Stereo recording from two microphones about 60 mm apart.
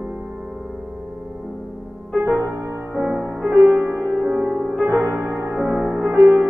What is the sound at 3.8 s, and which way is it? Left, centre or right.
Music, right.